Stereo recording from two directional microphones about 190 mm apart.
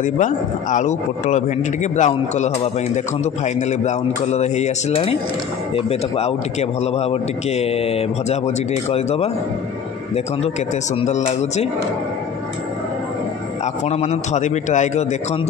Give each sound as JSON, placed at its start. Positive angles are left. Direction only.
{"t": 0.0, "sound": "a man's voice", "side_deg": 40}
{"t": 11.0, "sound": "a man's voice", "side_deg": 35}
{"t": 13.8, "sound": "a man's voice", "side_deg": 35}